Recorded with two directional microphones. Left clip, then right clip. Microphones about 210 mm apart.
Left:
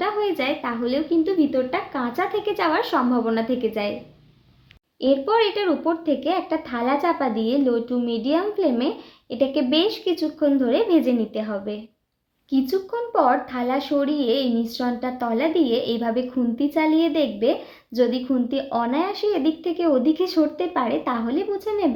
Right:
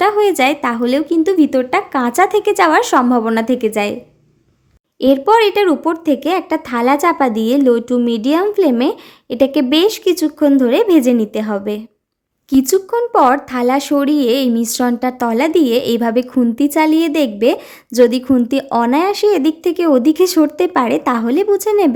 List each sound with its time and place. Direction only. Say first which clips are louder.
0.0 s speech: right 11 dB; 50° right (ahead or behind)
4.9 s speech: right 8 dB; 45° right (ahead or behind)